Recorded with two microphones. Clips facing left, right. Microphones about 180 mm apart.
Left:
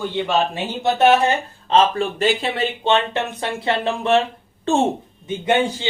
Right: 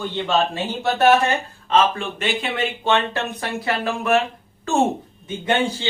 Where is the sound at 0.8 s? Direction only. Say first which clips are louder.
Left 1 dB; 20° left (ahead or behind).